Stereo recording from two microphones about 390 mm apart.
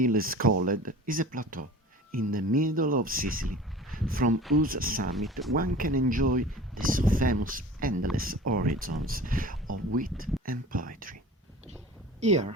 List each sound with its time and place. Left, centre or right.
0.0 s speech: right
5.1 s speech: centre
5.5 s speech: right
12.2 s speech: centre